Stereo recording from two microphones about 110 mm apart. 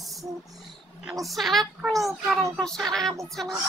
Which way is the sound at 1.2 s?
Centre (ahead or behind).